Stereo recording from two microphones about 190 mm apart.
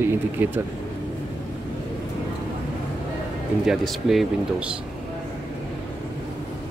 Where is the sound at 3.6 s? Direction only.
Centre (ahead or behind).